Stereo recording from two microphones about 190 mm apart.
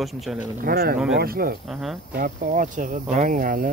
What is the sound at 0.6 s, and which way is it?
Speech, 55° right (ahead or behind).